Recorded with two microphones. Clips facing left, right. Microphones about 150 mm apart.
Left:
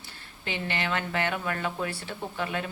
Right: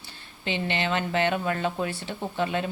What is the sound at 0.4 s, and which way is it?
Speech, 20° right (ahead or behind).